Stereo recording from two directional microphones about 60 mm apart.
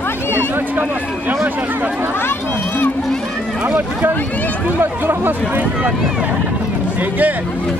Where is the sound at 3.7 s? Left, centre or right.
Right.